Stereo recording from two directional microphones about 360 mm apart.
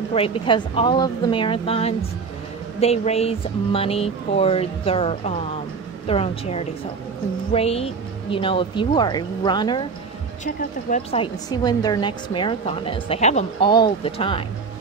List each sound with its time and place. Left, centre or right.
0.1 s a woman's voice: centre